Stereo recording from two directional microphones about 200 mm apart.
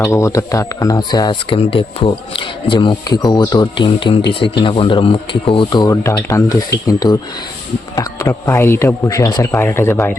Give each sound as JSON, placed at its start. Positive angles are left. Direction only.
{"t": 0.0, "sound": "speech", "side_deg": 15}